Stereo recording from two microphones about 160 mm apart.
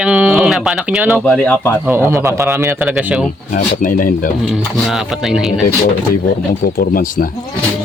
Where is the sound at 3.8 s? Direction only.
60° left (ahead or behind).